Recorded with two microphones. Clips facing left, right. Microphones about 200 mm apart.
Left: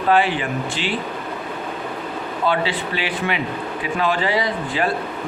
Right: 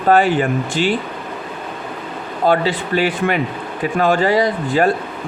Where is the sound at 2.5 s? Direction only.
45° right (ahead or behind).